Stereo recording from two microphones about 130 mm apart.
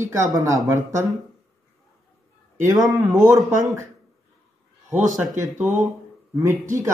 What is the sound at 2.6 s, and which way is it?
Speech, 25° right (ahead or behind).